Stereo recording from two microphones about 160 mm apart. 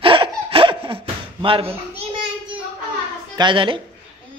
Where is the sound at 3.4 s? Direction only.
30° right (ahead or behind).